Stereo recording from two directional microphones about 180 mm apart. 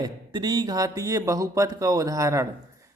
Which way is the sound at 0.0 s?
25° right (ahead or behind).